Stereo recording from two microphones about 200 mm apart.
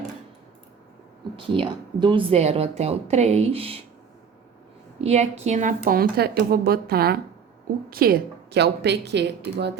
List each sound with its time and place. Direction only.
1.4 s speech: 25° right (ahead or behind)
4.9 s a woman's voice: 30° right (ahead or behind); by 9.2 s 60° right (ahead or behind)